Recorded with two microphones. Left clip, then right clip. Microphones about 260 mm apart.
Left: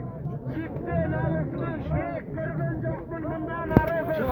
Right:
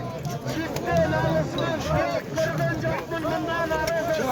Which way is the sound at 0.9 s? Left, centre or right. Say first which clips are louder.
Right 7 dB; right.